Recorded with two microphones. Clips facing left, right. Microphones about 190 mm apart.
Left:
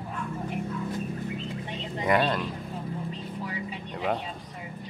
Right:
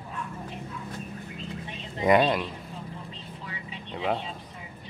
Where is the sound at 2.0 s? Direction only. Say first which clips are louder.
Right 4 dB; 15° right (ahead or behind).